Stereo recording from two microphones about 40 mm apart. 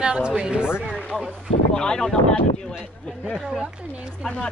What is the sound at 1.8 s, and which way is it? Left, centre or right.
Speech, centre.